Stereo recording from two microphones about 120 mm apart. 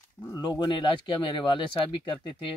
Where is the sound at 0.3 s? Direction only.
40° left (ahead or behind).